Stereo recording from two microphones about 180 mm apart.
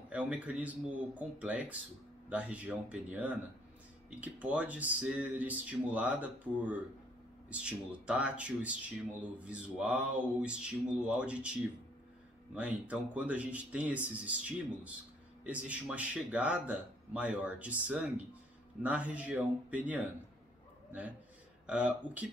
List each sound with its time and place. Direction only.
0.1 s speech: 5° right (ahead or behind)
12.5 s speech: 10° right (ahead or behind)
21.6 s speech: 5° right (ahead or behind)